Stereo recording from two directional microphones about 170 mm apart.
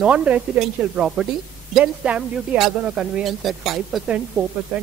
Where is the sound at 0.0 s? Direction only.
10° right (ahead or behind).